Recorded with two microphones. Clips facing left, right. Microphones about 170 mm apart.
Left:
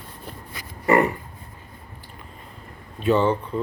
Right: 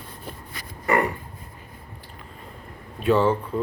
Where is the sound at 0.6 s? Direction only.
25° left (ahead or behind).